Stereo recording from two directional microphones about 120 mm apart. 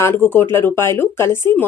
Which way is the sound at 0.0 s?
15° left (ahead or behind).